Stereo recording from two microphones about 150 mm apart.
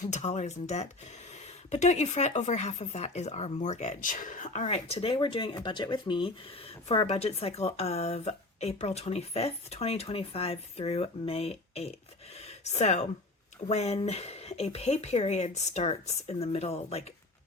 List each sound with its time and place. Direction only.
0.1 s speech: 50° left (ahead or behind)
12.4 s a sound: 45° left (ahead or behind)
13.7 s speech: 45° left (ahead or behind)